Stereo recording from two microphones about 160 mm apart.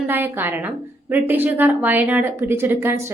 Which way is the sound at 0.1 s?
15° right (ahead or behind).